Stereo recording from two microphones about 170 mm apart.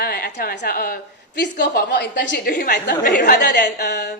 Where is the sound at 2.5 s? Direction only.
65° left (ahead or behind).